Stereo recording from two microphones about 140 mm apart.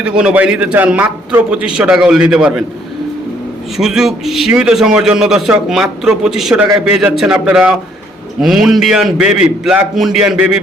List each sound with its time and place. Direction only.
0.0 s a man's voice: 5° right (ahead or behind)
3.8 s a man's voice: 5° right (ahead or behind)